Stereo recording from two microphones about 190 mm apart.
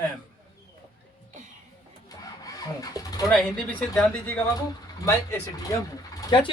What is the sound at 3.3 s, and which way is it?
Speech, 5° left (ahead or behind).